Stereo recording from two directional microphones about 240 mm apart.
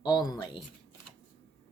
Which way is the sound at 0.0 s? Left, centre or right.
Centre.